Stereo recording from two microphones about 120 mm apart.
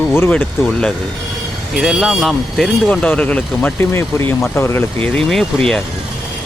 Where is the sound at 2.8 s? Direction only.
10° left (ahead or behind).